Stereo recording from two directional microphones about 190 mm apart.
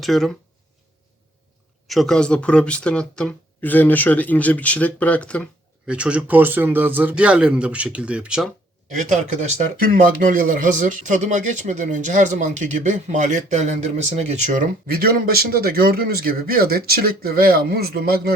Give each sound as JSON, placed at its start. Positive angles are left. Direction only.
{"t": 0.0, "sound": "speech", "side_deg": 0}
{"t": 1.9, "sound": "speech", "side_deg": 0}
{"t": 5.9, "sound": "a man's voice", "side_deg": -5}
{"t": 9.0, "sound": "speech", "side_deg": -40}